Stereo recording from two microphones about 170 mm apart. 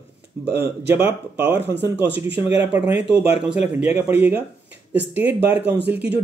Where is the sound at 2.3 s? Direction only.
35° left (ahead or behind).